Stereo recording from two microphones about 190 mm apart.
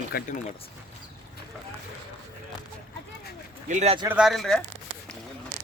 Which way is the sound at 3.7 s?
35° right (ahead or behind).